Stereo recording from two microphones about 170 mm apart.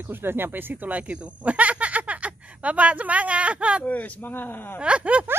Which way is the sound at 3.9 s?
10° left (ahead or behind).